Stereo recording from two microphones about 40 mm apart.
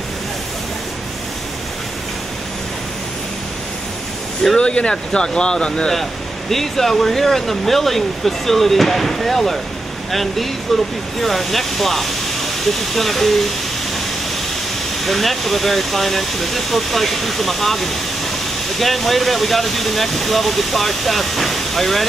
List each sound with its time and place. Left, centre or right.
4.6 s speech: left
6.5 s speech: centre
10.7 s speech: centre
15.0 s speech: centre